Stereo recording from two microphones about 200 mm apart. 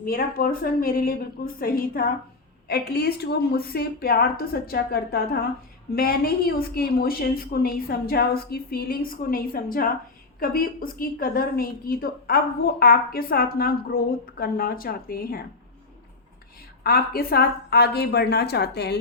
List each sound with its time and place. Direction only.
0.0 s a woman's voice: 45° left (ahead or behind)
16.8 s a woman's voice: 50° left (ahead or behind)